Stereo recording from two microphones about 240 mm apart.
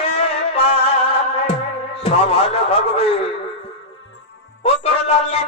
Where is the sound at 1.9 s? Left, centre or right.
Left.